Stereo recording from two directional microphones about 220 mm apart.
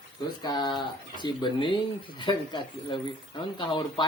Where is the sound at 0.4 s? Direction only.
20° left (ahead or behind).